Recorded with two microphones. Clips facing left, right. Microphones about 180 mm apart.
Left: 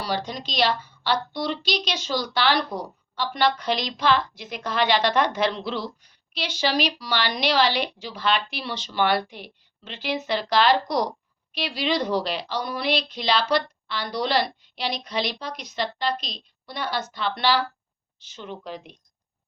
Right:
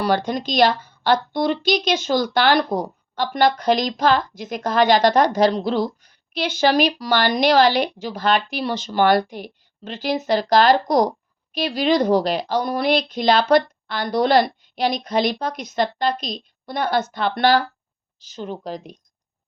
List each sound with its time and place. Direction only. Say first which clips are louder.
0.0 s a woman's voice: right 8 dB; 55° right (ahead or behind)
18.2 s speech: right 7 dB; 35° right (ahead or behind)